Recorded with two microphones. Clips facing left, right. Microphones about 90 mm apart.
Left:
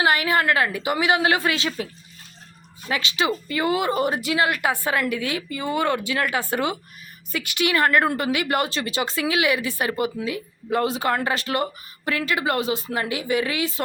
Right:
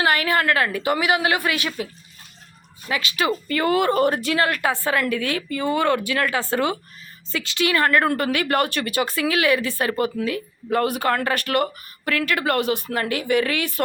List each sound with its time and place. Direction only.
0.0 s a woman's voice: 20° left (ahead or behind)
2.9 s a woman's voice: 25° left (ahead or behind)